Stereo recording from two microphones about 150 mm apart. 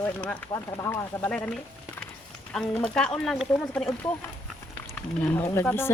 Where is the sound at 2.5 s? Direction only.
5° left (ahead or behind).